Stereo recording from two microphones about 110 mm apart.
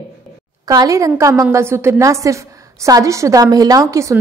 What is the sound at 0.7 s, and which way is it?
A woman's voice, 35° right (ahead or behind).